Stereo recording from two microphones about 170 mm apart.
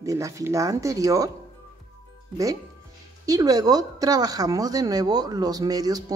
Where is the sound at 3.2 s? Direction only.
20° right (ahead or behind).